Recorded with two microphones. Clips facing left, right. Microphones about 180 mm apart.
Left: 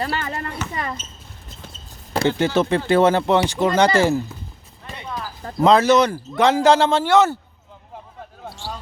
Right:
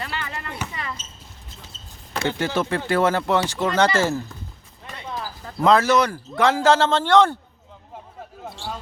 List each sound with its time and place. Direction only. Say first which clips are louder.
0.0 s speech: left 6 dB; 40° left (ahead or behind)
0.7 s a sound: left 5 dB; 45° left (ahead or behind)
2.2 s speech: left 5 dB; 20° left (ahead or behind)
5.5 s speech: left 3 dB; 20° left (ahead or behind)